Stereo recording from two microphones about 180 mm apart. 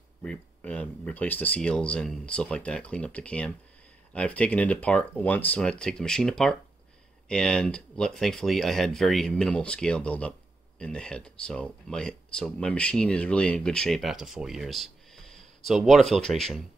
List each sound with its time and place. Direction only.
0.2 s speech: 5° left (ahead or behind)